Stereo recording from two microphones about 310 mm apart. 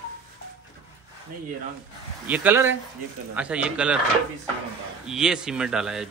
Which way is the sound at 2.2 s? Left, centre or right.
Centre.